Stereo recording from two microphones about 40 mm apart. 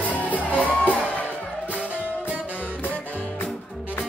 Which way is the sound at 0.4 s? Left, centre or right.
Right.